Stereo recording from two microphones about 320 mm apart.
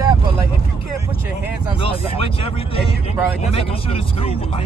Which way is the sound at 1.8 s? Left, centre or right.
Centre.